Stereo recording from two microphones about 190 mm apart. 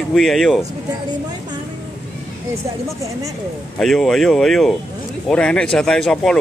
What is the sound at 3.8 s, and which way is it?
Speech, centre (ahead or behind).